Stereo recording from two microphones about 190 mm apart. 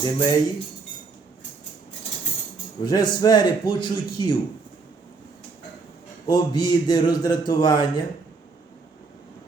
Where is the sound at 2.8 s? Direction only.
20° left (ahead or behind).